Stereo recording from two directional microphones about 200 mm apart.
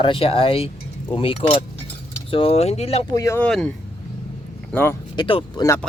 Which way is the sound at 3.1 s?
15° left (ahead or behind).